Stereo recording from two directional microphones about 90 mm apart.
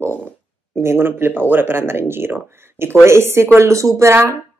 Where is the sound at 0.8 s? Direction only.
25° right (ahead or behind).